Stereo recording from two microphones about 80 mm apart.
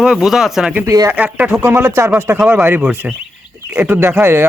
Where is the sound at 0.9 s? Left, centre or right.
Right.